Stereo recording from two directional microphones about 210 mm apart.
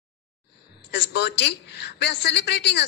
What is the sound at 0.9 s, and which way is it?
A woman's voice, 55° left (ahead or behind).